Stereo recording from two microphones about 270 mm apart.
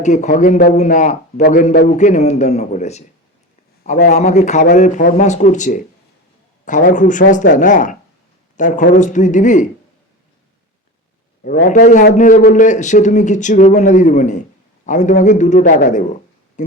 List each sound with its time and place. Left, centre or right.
0.0 s a man's voice: left
11.6 s a man's voice: left